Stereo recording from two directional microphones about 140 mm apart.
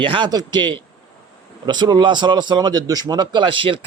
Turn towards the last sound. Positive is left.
turn(degrees=-40)  # may be behind; listen again after turning